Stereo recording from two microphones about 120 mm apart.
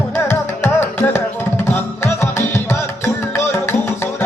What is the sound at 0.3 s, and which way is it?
Music, 15° left (ahead or behind).